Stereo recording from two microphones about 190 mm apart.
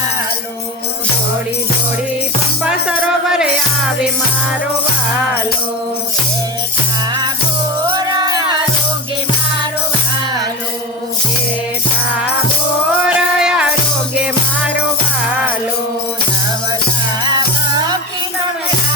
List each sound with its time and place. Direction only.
2.6 s music: 5° right (ahead or behind)
13.1 s music: 5° right (ahead or behind)